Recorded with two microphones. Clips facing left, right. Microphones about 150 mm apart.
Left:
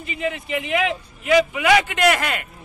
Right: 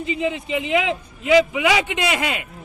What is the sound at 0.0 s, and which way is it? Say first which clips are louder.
A man's voice: right 3 dB; 20° right (ahead or behind).